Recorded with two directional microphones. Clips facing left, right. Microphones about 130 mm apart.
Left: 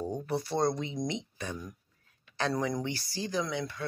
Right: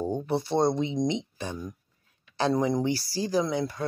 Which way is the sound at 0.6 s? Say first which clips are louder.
Right 6 dB; 25° right (ahead or behind).